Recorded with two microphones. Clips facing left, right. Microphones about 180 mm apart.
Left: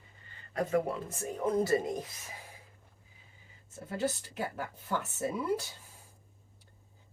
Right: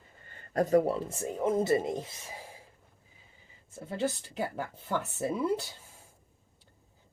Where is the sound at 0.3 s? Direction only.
45° right (ahead or behind).